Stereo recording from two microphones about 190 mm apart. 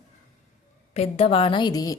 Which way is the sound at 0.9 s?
30° left (ahead or behind).